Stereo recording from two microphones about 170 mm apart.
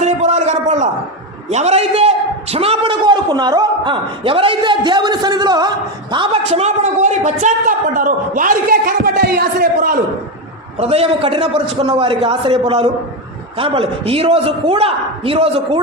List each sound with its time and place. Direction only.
0.0 s a sound: 40° right (ahead or behind)
1.5 s a man's voice: 40° right (ahead or behind); by 10.0 s 60° right (ahead or behind)
10.8 s a man's voice: 35° right (ahead or behind)